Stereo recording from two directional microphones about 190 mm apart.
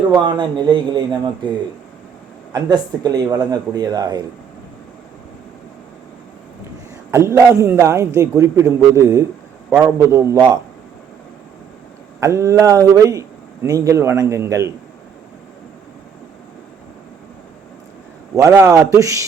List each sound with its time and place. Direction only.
0.3 s speech: 25° right (ahead or behind)
2.5 s speech: 20° right (ahead or behind)
7.1 s a man's voice: 15° right (ahead or behind)
12.2 s a man's voice: 15° right (ahead or behind)
18.3 s a man's voice: 15° right (ahead or behind)